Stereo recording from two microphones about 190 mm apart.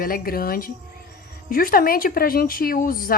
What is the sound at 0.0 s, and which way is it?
Speech, 50° left (ahead or behind).